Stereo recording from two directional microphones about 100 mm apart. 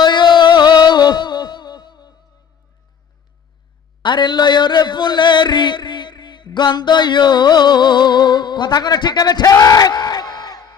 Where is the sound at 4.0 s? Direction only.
50° left (ahead or behind).